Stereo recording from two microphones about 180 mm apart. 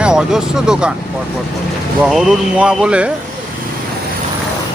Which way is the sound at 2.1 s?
Centre (ahead or behind).